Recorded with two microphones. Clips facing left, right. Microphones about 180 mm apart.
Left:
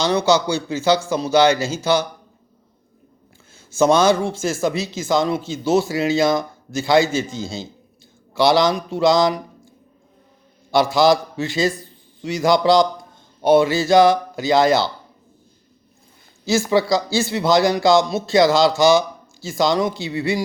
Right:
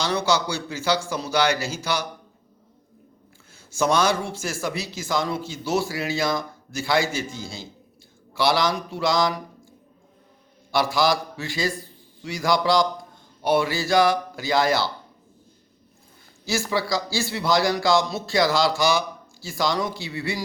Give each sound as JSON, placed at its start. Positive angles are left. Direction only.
{"t": 0.0, "sound": "speech", "side_deg": 20}
{"t": 3.8, "sound": "speech", "side_deg": 25}
{"t": 10.7, "sound": "speech", "side_deg": 25}
{"t": 16.5, "sound": "speech", "side_deg": 20}